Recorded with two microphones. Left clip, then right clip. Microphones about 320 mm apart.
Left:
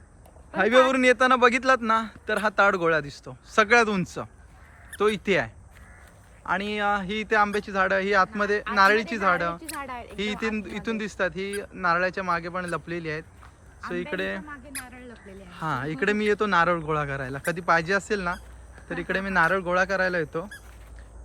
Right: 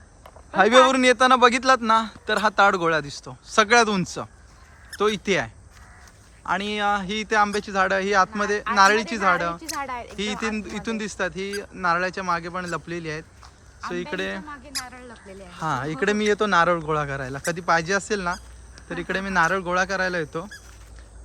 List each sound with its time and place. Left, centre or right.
0.5 s speech: centre
9.6 s a sound: right
10.4 s speech: centre